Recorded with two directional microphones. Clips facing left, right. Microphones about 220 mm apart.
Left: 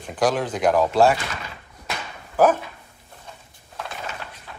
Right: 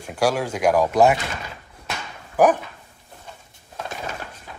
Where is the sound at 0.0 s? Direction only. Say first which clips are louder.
Even; 10° right (ahead or behind).